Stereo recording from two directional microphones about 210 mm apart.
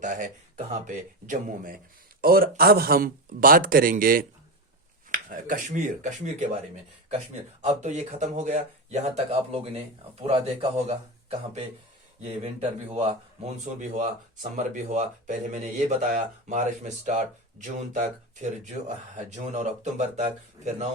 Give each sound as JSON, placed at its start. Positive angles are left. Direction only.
{"t": 0.0, "sound": "speech", "side_deg": -35}
{"t": 7.6, "sound": "speech", "side_deg": -35}